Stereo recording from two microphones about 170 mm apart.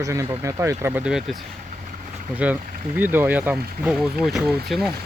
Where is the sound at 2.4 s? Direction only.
5° right (ahead or behind).